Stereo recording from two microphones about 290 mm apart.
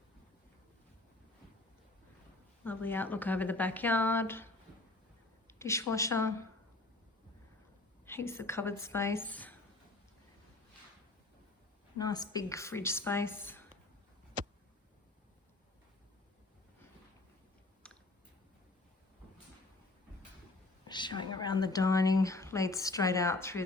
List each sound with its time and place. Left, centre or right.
2.6 s speech: centre
5.5 s a woman's voice: centre
8.0 s speech: centre
11.9 s speech: centre
14.4 s a sound: right
17.8 s chewing: centre
20.8 s speech: centre